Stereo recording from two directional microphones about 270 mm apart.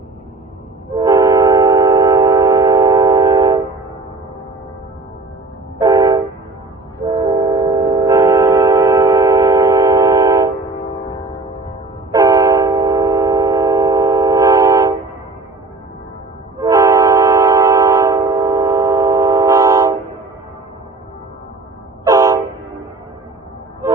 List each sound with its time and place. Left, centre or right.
0.9 s train: centre
5.8 s train: centre
10.6 s music: centre
12.1 s train: centre
16.6 s train: centre
22.0 s train: centre